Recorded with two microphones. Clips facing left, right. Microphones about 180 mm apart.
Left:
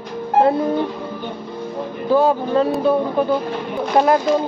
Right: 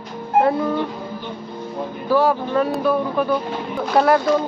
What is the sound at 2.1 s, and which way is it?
A man's voice, 25° left (ahead or behind).